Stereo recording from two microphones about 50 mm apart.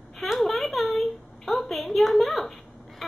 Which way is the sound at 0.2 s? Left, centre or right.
Centre.